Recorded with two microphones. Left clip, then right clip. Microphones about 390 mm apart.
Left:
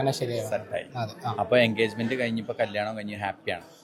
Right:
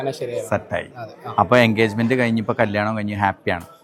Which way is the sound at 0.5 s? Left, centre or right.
Right.